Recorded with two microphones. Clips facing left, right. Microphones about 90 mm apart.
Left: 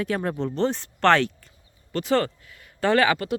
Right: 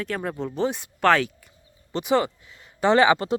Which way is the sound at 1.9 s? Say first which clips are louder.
Right 1 dB; 15° right (ahead or behind).